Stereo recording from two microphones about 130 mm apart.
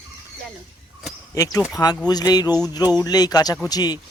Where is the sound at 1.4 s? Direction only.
25° left (ahead or behind).